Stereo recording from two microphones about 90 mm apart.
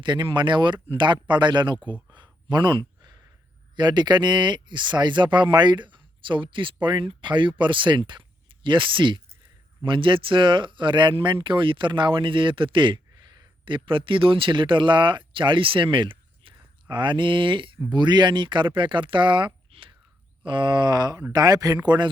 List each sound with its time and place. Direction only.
0.0 s speech: 60° right (ahead or behind)
16.9 s speech: 60° right (ahead or behind)
17.8 s speech: 55° right (ahead or behind)